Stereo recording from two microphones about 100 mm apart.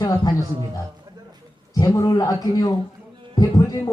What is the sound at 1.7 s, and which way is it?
A man's voice, 35° left (ahead or behind).